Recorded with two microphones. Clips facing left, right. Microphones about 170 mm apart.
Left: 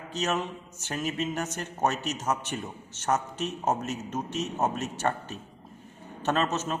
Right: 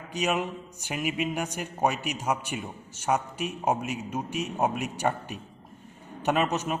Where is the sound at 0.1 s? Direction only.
15° right (ahead or behind).